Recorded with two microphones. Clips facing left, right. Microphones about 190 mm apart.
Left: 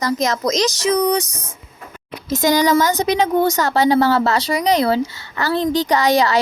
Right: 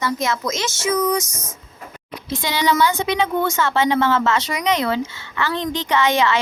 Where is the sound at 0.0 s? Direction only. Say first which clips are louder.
Left 3 dB; 40° left (ahead or behind).